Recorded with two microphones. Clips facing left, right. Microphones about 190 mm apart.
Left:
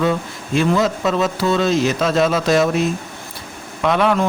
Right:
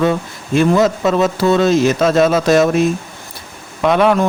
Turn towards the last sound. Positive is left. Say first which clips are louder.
# right 4 dB
turn(degrees=-50)  # may be behind; listen again after turning